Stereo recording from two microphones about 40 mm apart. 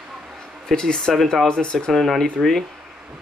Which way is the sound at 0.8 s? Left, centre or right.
Centre.